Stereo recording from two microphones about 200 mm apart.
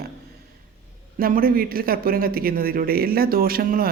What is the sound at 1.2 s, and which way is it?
A man's voice, 45° right (ahead or behind).